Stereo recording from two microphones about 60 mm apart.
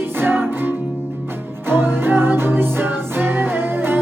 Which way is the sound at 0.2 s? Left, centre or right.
Right.